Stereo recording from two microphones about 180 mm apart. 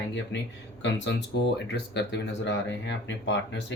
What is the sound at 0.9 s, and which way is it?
Speech, 75° left (ahead or behind).